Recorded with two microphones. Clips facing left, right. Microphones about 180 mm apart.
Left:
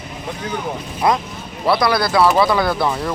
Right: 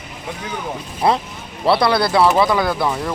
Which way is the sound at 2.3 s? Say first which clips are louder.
Even; 15° right (ahead or behind).